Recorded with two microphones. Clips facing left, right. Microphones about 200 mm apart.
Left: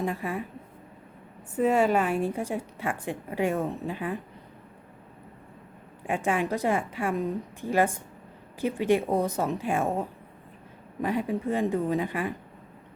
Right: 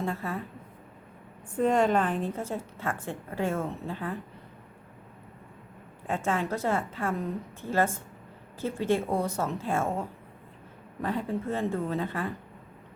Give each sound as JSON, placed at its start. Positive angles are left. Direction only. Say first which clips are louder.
{"t": 0.0, "sound": "a woman's voice", "louder": "left 2 dB", "side_deg": 15}
{"t": 1.5, "sound": "a woman's voice", "louder": "left 1 dB", "side_deg": 5}
{"t": 6.1, "sound": "a woman's voice", "louder": "left 2 dB", "side_deg": 15}